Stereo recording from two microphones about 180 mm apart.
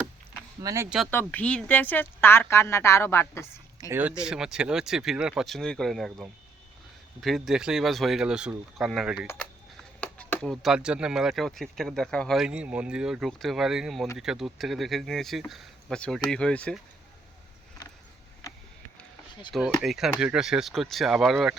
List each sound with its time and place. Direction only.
0.6 s speech: 20° right (ahead or behind)
1.1 s speech: 10° left (ahead or behind)
3.8 s speech: 20° right (ahead or behind)
4.2 s speech: 5° right (ahead or behind)
9.2 s speech: 15° left (ahead or behind)
19.8 s speech: centre (ahead or behind)